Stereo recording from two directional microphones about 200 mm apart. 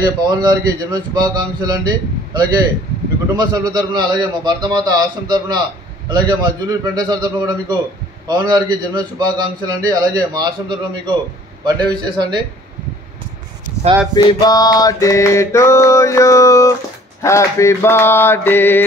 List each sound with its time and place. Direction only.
0.0 s a man's voice: 20° right (ahead or behind)
14.1 s mantra: 20° left (ahead or behind)